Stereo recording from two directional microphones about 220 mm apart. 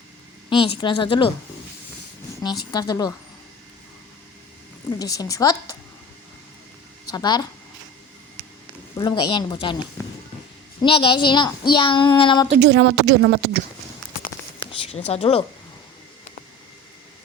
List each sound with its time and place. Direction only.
0.6 s a woman's voice: 20° left (ahead or behind)
2.7 s speech: 20° left (ahead or behind)
4.9 s a woman's voice: 15° left (ahead or behind)
7.1 s a woman's voice: 20° left (ahead or behind)
9.0 s a woman's voice: 20° left (ahead or behind)
12.5 s speech: 50° right (ahead or behind)
14.7 s speech: 30° left (ahead or behind)